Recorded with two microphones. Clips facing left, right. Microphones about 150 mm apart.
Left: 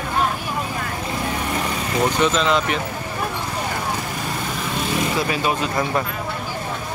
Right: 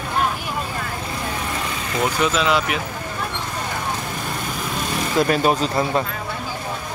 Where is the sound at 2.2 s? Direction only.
5° right (ahead or behind).